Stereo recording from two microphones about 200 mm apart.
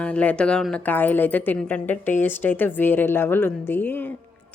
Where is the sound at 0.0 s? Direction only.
5° left (ahead or behind).